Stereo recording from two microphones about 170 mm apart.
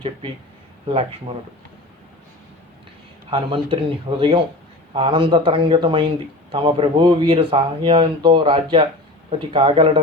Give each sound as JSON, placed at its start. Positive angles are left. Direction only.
{"t": 1.3, "sound": "speech", "side_deg": -35}
{"t": 3.2, "sound": "speech", "side_deg": -30}